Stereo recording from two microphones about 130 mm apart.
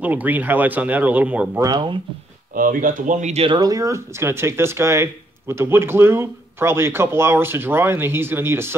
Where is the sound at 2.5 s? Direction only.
90° right; by 3.4 s 65° right (ahead or behind).